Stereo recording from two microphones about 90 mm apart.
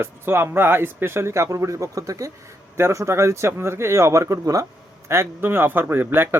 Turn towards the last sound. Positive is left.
turn(degrees=-25)  # may be behind; listen again after turning